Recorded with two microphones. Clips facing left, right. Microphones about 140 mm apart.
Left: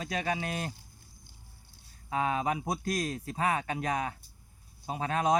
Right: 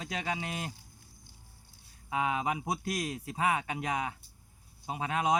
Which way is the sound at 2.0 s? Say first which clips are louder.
Left 1 dB; 15° right (ahead or behind).